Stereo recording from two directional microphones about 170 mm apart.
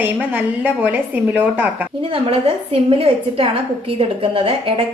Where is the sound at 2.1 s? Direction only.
35° right (ahead or behind).